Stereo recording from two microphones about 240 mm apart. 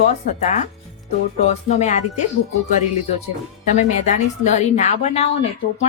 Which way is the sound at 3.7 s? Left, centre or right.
Left.